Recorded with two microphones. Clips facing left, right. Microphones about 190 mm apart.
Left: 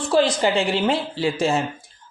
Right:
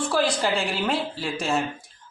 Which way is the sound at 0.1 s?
25° left (ahead or behind).